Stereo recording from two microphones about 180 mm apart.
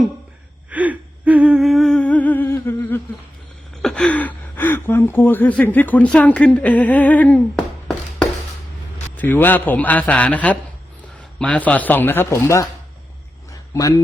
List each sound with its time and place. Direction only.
0.7 s humming: 10° right (ahead or behind); by 3.0 s 10° left (ahead or behind)
3.8 s a man's voice: 5° left (ahead or behind)
13.5 s a sound: 20° left (ahead or behind)